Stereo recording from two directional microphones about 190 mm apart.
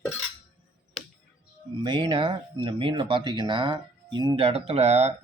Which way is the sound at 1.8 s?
25° right (ahead or behind).